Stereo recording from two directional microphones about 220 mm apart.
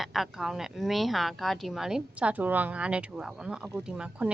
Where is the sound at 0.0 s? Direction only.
Centre (ahead or behind).